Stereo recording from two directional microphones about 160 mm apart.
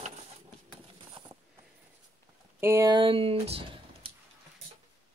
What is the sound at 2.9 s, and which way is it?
Speech, 35° right (ahead or behind).